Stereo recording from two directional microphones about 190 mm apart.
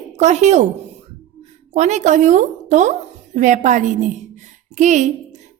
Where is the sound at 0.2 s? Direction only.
35° right (ahead or behind).